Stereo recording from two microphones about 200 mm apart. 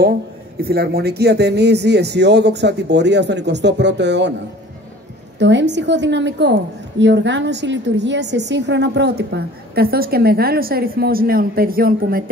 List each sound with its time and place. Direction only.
0.6 s a woman's voice: 50° right (ahead or behind)
5.4 s a woman's voice: 60° right (ahead or behind); by 12.3 s 45° right (ahead or behind)